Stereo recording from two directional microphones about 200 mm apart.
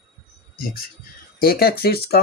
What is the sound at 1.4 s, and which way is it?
Speech, 50° left (ahead or behind).